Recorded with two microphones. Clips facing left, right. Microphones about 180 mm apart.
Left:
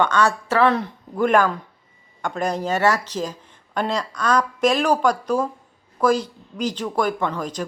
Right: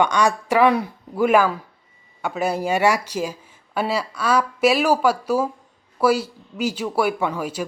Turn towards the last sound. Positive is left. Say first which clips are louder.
# right 1 dB
turn(degrees=-10)  # may be behind; listen again after turning